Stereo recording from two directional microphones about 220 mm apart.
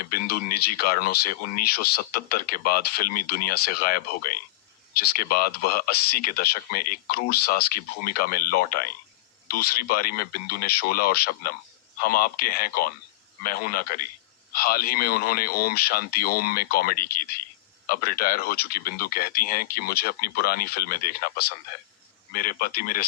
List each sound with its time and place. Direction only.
0.0 s speech: 45° left (ahead or behind)